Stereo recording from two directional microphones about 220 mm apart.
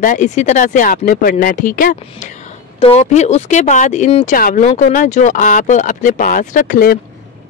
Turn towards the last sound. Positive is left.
turn(degrees=40)  # may be behind; listen again after turning